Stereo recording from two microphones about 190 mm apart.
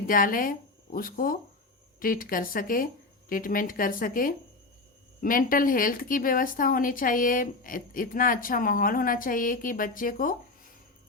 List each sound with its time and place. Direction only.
0.1 s speech: 45° left (ahead or behind)